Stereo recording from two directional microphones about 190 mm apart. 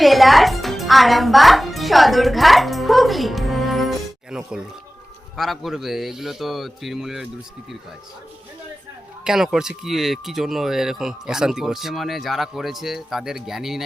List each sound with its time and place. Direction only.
0.0 s music: centre (ahead or behind)
5.4 s speech: centre (ahead or behind)
9.2 s speech: 5° right (ahead or behind)